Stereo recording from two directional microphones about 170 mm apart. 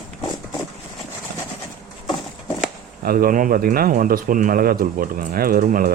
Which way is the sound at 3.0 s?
60° right (ahead or behind).